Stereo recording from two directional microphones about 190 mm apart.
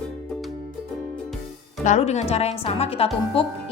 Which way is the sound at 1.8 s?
35° left (ahead or behind).